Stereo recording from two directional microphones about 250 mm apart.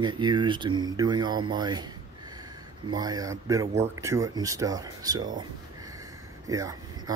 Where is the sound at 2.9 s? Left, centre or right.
Centre.